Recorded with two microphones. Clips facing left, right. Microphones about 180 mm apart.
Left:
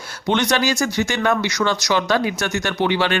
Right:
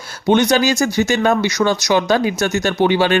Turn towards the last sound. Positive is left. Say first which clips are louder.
# right 5 dB
turn(degrees=-25)  # may be behind; listen again after turning